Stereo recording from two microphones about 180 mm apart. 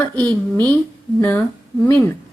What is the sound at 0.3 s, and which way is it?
A woman's voice, 10° left (ahead or behind).